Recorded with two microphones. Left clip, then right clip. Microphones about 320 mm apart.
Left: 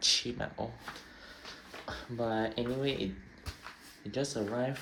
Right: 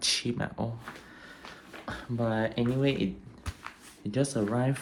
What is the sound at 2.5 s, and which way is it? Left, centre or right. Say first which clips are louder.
Speech: right 5 dB; centre.